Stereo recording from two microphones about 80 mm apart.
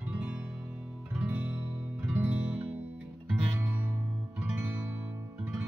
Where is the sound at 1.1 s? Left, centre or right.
Centre.